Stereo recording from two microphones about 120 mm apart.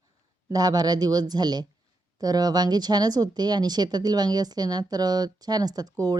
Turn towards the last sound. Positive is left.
turn(degrees=-30)  # may be behind; listen again after turning